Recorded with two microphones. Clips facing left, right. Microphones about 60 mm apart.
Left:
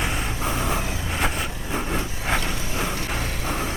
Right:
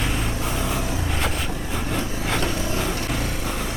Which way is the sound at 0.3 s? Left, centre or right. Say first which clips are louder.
Even; left.